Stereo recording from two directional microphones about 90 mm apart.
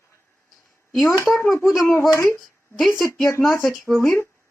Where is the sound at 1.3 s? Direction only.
30° left (ahead or behind).